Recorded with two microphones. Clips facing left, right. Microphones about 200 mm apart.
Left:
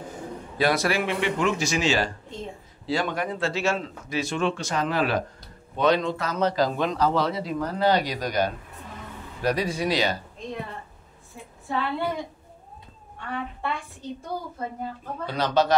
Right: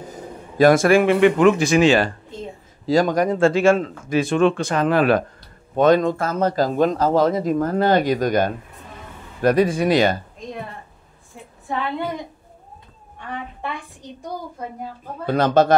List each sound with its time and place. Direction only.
0.6 s a man's voice: 50° right (ahead or behind)
2.9 s a man's voice: 40° right (ahead or behind)
13.3 s a woman's voice: 15° right (ahead or behind)
15.2 s a man's voice: 50° right (ahead or behind)